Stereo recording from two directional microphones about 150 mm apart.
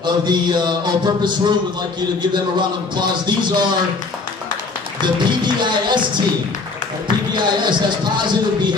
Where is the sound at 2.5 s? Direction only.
30° right (ahead or behind).